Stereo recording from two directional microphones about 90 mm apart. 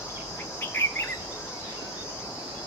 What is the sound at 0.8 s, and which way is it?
Cricket, 25° left (ahead or behind).